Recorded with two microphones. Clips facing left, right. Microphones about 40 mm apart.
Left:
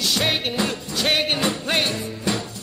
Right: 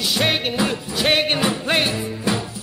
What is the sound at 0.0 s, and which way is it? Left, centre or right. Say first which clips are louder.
Music: right 2 dB; centre.